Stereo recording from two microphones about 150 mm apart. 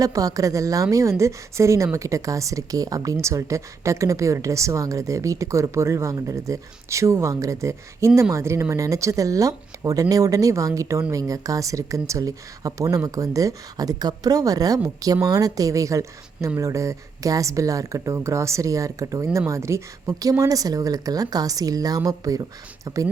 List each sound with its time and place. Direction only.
0.0 s a woman's voice: 25° right (ahead or behind)